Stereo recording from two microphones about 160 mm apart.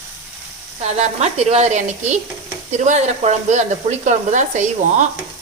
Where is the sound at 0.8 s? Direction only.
45° right (ahead or behind).